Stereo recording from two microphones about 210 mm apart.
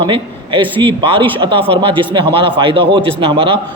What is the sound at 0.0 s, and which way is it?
A man's voice, 25° right (ahead or behind).